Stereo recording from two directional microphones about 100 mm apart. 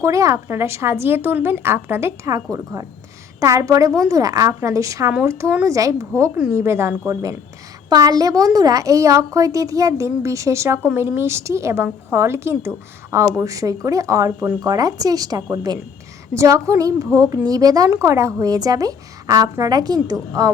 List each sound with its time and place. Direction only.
0.0 s a woman's voice: 30° right (ahead or behind)